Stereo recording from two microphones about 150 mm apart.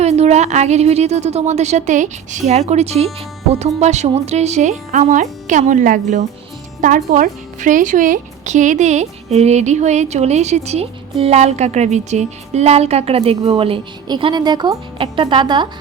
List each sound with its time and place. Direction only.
0.0 s a woman's voice: 45° right (ahead or behind); by 15.6 s 30° right (ahead or behind)